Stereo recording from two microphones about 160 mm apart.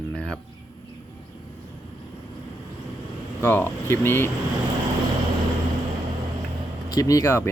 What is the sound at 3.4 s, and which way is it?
Speech, 15° left (ahead or behind).